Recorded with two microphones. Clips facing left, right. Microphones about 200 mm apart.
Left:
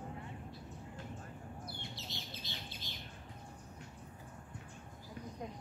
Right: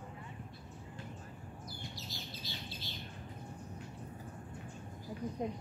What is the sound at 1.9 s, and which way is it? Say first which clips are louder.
Bird: right 1 dB; 20° left (ahead or behind).